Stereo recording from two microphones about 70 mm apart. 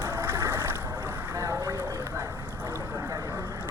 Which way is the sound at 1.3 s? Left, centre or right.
Right.